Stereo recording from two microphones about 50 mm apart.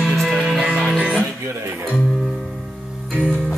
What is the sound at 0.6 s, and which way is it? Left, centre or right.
Music, right.